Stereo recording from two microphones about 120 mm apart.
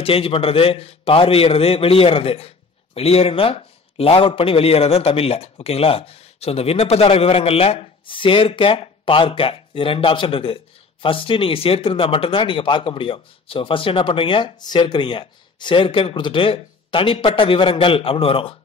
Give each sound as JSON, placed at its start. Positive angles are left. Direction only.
{"t": 0.0, "sound": "a man's voice", "side_deg": 50}